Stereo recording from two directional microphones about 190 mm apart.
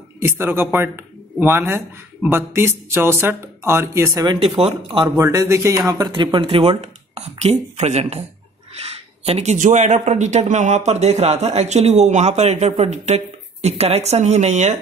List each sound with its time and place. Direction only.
0.2 s speech: 10° right (ahead or behind)
4.4 s speech: 35° right (ahead or behind)
5.0 s speech: 15° right (ahead or behind); by 14.8 s 35° right (ahead or behind)